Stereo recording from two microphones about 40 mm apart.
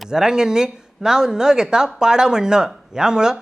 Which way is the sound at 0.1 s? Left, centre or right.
Centre.